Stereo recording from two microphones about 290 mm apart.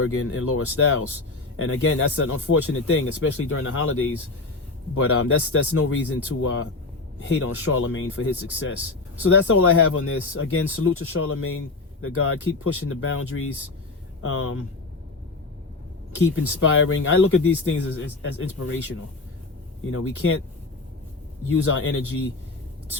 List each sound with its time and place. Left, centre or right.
0.0 s speech: left
16.1 s speech: left
19.9 s speech: left
21.6 s speech: left